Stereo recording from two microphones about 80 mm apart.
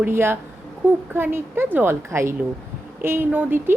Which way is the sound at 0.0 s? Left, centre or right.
Right.